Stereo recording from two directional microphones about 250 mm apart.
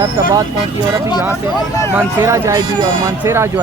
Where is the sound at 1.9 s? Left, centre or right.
Centre.